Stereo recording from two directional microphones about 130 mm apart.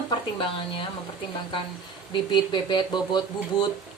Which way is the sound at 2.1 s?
35° left (ahead or behind).